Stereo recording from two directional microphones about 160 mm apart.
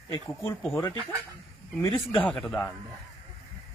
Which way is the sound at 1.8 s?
10° left (ahead or behind).